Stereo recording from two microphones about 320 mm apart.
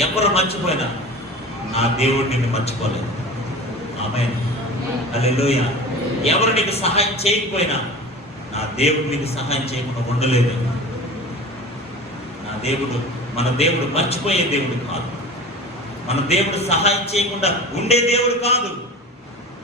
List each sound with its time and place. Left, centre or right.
0.0 s a man's voice: centre
3.9 s a man's voice: centre
13.3 s a man's voice: centre
16.0 s a man's voice: centre